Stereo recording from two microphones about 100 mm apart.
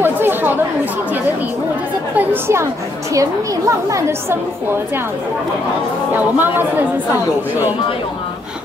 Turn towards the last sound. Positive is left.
turn(degrees=-20)  # may be behind; listen again after turning